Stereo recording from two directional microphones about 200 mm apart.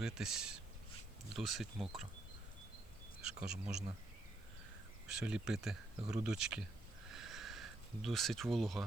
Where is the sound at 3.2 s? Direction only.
5° right (ahead or behind).